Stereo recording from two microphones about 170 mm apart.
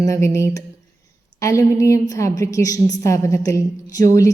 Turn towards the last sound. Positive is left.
turn(degrees=20)  # may be behind; listen again after turning